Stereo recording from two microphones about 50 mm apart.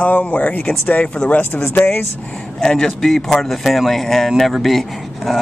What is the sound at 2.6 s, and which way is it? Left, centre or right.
Speech, centre.